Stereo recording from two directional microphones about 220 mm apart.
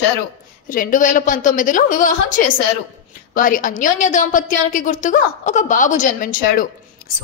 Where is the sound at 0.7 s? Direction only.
35° left (ahead or behind).